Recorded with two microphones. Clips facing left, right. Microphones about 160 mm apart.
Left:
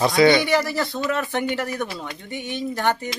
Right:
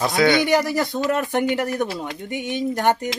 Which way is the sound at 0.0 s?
Centre (ahead or behind).